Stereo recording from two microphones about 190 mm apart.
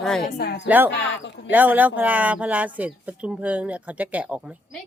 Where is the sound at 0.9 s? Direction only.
65° left (ahead or behind).